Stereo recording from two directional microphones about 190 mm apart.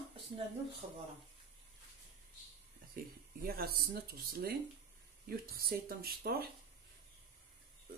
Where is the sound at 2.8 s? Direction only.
50° right (ahead or behind).